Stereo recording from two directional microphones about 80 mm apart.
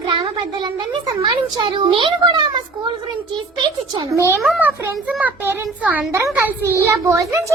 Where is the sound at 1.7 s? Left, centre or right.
Right.